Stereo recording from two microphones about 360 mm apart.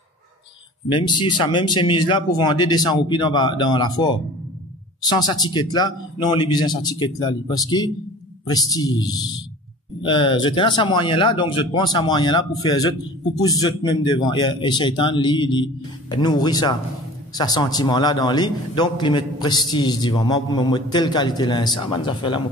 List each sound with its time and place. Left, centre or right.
0.8 s a man's voice: centre